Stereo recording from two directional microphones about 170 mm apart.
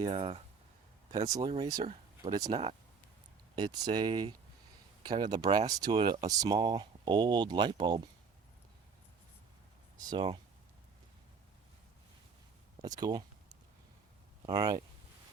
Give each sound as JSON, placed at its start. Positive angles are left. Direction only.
{"t": 0.0, "sound": "speech", "side_deg": -35}
{"t": 1.2, "sound": "speech", "side_deg": -25}
{"t": 10.1, "sound": "speech", "side_deg": -25}
{"t": 12.8, "sound": "speech", "side_deg": -25}
{"t": 14.4, "sound": "speech", "side_deg": -25}